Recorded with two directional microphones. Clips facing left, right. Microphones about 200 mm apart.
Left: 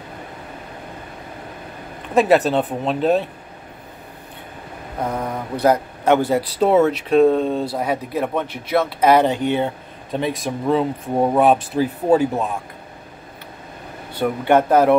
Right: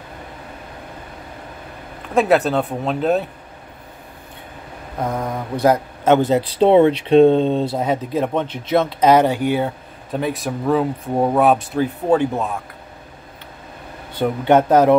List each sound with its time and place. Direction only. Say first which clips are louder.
2.1 s speech: left 1 dB; centre (ahead or behind)
5.0 s speech: right 1 dB; 10° right (ahead or behind)
14.4 s speech: right 2 dB; 15° right (ahead or behind)